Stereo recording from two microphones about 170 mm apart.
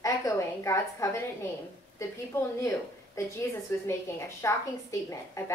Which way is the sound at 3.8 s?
15° left (ahead or behind).